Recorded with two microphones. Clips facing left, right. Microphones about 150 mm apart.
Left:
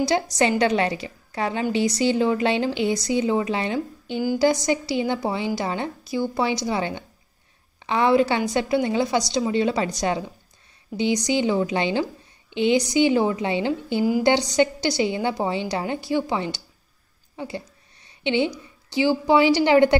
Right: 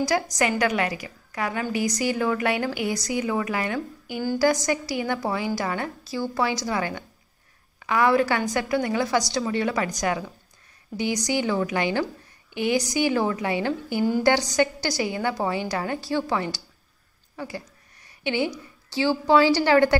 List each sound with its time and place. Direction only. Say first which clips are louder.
0.4 s a woman's voice: left 5 dB; 25° left (ahead or behind)